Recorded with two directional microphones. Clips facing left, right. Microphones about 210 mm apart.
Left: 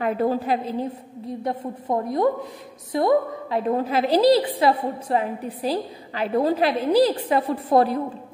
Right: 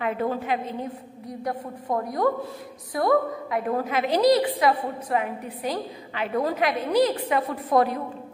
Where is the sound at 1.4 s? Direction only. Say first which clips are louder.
Left 2 dB; 25° left (ahead or behind).